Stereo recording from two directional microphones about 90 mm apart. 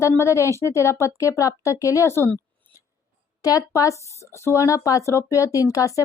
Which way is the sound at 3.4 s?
40° left (ahead or behind).